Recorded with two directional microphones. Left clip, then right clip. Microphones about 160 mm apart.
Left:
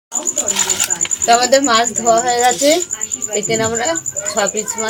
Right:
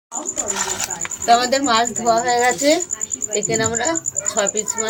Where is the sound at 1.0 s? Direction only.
25° left (ahead or behind).